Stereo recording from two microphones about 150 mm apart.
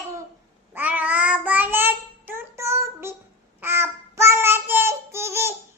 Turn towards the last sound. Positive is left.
turn(degrees=-15)  # may be behind; listen again after turning